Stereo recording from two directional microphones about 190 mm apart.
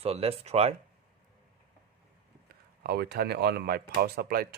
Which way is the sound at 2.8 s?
55° right (ahead or behind).